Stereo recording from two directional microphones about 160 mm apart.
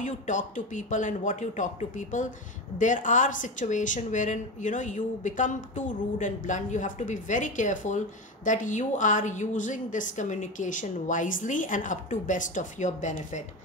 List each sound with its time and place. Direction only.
0.0 s speech: 50° left (ahead or behind)